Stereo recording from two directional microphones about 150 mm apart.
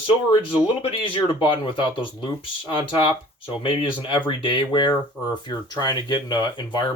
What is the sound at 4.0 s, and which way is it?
Speech, 30° left (ahead or behind).